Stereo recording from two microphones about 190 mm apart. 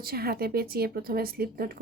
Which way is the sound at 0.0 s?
55° right (ahead or behind).